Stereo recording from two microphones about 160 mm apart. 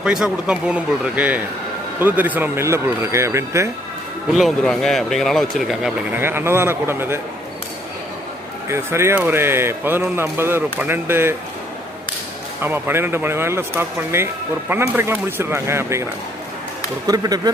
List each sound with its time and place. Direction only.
0.0 s speech: 5° right (ahead or behind)
4.3 s speech: centre (ahead or behind)
8.7 s speech: 15° right (ahead or behind)
12.6 s speech: 15° right (ahead or behind)
17.1 s speech: 25° right (ahead or behind)